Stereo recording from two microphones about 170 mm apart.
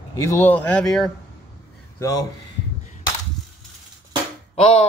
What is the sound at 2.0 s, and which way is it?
Speech, 20° left (ahead or behind).